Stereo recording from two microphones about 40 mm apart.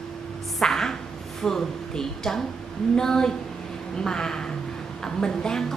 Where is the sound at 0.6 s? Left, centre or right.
Centre.